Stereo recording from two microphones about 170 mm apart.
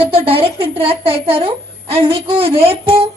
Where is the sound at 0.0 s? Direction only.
35° right (ahead or behind).